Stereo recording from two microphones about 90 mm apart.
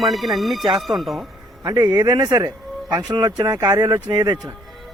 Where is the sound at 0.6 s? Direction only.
55° right (ahead or behind).